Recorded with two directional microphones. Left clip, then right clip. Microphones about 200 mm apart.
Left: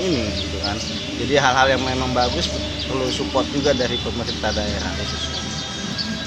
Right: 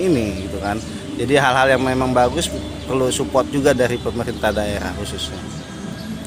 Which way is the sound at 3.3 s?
55° right (ahead or behind).